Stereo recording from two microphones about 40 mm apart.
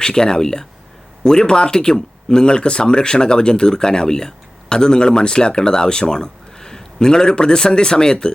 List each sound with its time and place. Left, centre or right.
0.0 s speech: centre